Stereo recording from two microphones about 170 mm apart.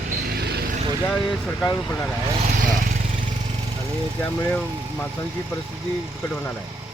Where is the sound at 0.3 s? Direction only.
70° right (ahead or behind).